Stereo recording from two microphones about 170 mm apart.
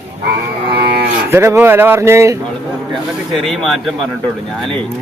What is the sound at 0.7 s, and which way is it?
Moo, 70° right (ahead or behind).